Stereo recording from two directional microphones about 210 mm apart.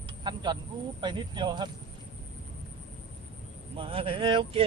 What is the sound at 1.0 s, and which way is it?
Speech, 20° right (ahead or behind).